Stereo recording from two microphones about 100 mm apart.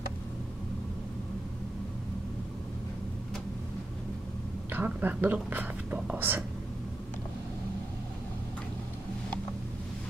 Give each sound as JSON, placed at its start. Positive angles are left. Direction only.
{"t": 4.7, "sound": "speech", "side_deg": -15}